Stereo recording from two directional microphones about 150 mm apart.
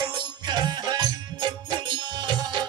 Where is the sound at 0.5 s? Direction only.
30° right (ahead or behind).